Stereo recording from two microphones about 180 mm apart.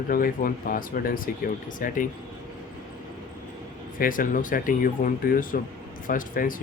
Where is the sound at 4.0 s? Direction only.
50° left (ahead or behind).